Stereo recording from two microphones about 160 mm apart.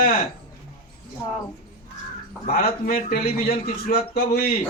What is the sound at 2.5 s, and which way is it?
A man's voice, 65° left (ahead or behind).